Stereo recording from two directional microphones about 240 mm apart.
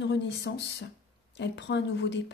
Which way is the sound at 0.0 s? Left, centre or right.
Left.